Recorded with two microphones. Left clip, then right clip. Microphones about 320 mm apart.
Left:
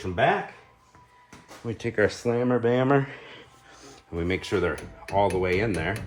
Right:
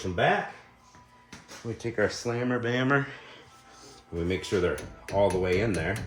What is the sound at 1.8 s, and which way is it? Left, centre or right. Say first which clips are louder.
Speech: left 4 dB; left.